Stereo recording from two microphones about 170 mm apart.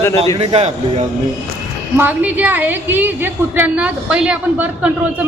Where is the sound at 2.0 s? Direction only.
10° right (ahead or behind).